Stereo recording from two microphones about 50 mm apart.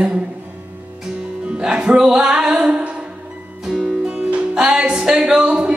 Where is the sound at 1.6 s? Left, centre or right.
Centre.